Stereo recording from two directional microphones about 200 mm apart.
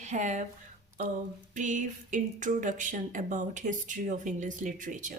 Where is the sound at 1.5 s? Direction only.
40° right (ahead or behind).